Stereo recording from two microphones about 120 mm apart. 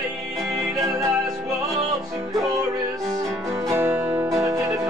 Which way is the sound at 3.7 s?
20° right (ahead or behind).